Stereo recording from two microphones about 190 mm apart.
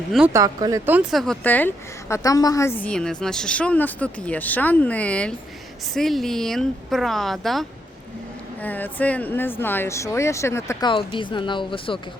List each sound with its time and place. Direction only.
0.3 s speech: 20° right (ahead or behind)
0.9 s speech: 10° right (ahead or behind)
1.2 s a woman's voice: 5° left (ahead or behind); by 11.9 s 25° left (ahead or behind)